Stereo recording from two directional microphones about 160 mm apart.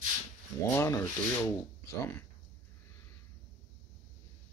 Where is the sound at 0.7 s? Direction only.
15° left (ahead or behind).